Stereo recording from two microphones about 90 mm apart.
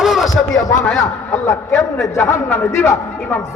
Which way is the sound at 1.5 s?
35° left (ahead or behind).